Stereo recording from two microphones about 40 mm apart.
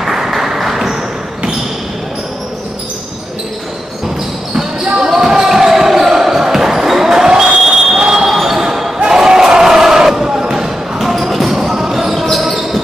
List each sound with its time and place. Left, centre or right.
0.0 s a sound: centre
4.6 s basketball bounce: centre
11.0 s basketball bounce: centre
12.1 s basketball bounce: centre